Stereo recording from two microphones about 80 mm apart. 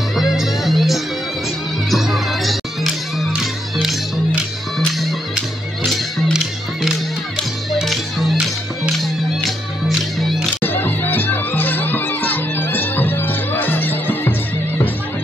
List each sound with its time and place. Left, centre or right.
0.1 s music: centre
7.7 s music: centre
10.6 s music: left